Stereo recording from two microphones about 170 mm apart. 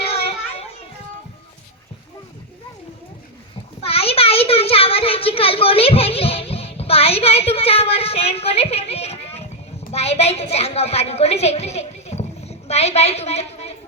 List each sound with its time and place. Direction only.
0.0 s children playing: 35° left (ahead or behind)
3.8 s a sound: 35° left (ahead or behind)
9.9 s a woman's voice: 35° left (ahead or behind)